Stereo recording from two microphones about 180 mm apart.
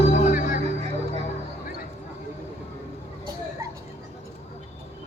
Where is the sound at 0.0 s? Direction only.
40° left (ahead or behind).